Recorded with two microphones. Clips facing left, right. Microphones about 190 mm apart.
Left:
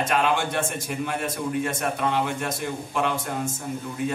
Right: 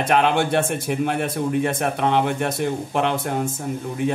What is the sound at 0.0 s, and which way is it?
A man's voice, 60° right (ahead or behind).